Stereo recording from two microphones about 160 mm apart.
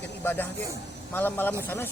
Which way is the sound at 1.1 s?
10° left (ahead or behind).